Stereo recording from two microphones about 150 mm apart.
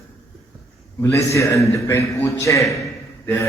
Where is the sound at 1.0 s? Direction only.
20° left (ahead or behind).